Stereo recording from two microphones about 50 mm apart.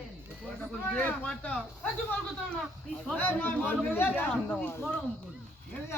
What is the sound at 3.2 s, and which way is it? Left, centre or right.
Speech, left.